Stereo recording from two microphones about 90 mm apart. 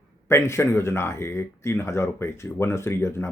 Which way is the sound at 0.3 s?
30° left (ahead or behind).